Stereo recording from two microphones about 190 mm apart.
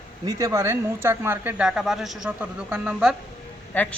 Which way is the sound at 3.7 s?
10° left (ahead or behind).